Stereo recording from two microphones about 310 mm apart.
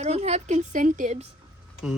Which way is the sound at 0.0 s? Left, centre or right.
Right.